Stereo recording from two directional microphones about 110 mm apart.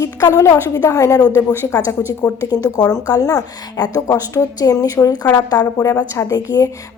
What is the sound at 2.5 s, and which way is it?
A woman's voice, 40° left (ahead or behind).